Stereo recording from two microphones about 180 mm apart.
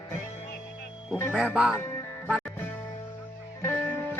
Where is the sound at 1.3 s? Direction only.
5° right (ahead or behind).